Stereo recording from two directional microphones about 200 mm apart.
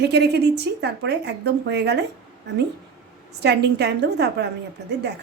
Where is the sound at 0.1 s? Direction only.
55° right (ahead or behind).